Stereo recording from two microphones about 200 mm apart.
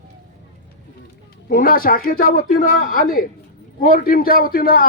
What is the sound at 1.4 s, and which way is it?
A man's voice, 45° left (ahead or behind).